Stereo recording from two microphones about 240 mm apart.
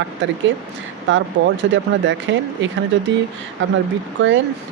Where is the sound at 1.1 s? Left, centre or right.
Right.